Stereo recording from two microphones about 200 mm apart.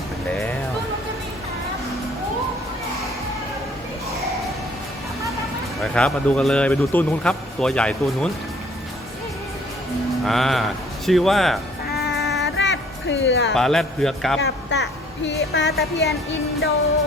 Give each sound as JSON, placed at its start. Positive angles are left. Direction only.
{"t": 5.8, "sound": "a man's voice", "side_deg": 5}
{"t": 10.2, "sound": "a man's voice", "side_deg": 0}
{"t": 11.9, "sound": "music", "side_deg": 55}
{"t": 13.5, "sound": "a man's voice", "side_deg": 0}
{"t": 14.4, "sound": "a woman's voice", "side_deg": 60}